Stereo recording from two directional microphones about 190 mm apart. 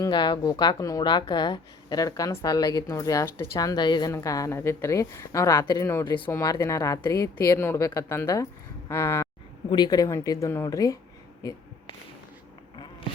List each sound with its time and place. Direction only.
0.0 s a woman's voice: 25° left (ahead or behind)